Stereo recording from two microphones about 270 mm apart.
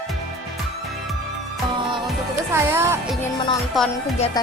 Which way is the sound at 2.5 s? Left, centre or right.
Centre.